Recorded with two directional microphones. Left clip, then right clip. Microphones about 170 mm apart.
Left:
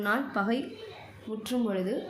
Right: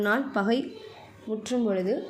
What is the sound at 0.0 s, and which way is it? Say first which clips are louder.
A woman's voice: right 3 dB; 20° right (ahead or behind).